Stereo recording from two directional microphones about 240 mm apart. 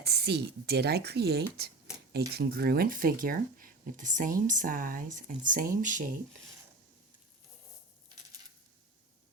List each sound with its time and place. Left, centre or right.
0.0 s speech: right